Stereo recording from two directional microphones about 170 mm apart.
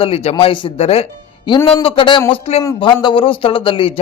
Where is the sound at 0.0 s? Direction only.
35° left (ahead or behind).